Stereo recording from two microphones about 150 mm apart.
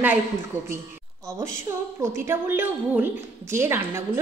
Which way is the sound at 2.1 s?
15° right (ahead or behind).